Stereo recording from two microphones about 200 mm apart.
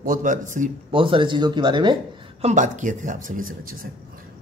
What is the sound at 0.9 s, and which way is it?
Speech, 25° right (ahead or behind).